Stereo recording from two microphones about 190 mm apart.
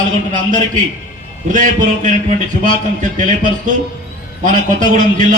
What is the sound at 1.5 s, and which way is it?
A man's voice, 45° right (ahead or behind).